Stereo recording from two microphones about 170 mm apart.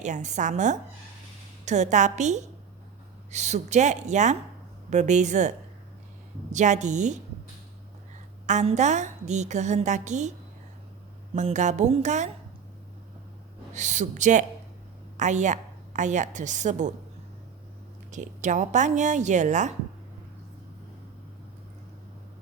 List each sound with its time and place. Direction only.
0.0 s a woman's voice: 45° right (ahead or behind)
8.4 s a woman's voice: 45° right (ahead or behind)
11.3 s a woman's voice: 45° right (ahead or behind)
13.7 s a woman's voice: 45° right (ahead or behind)
18.1 s a woman's voice: 45° right (ahead or behind)